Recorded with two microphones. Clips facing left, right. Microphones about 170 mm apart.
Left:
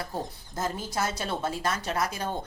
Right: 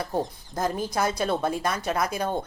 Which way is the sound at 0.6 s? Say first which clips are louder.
Right 4 dB; 15° right (ahead or behind).